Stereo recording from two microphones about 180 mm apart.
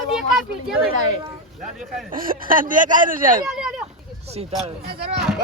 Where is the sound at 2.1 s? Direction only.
50° right (ahead or behind).